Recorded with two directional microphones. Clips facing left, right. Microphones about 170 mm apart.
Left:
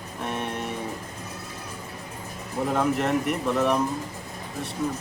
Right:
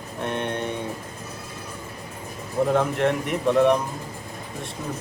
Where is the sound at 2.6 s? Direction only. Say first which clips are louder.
Right 3 dB; centre (ahead or behind).